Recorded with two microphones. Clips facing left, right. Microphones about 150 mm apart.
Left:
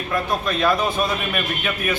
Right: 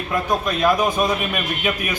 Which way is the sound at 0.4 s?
15° right (ahead or behind).